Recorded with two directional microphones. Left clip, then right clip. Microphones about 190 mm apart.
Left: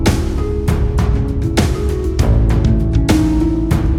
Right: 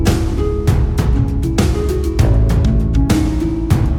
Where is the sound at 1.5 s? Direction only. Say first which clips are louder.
Even; centre (ahead or behind).